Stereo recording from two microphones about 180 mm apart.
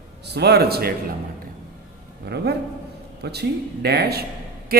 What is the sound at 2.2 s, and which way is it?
Speech, 65° right (ahead or behind).